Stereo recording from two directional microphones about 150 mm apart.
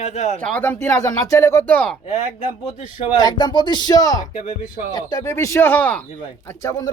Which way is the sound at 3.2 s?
30° left (ahead or behind).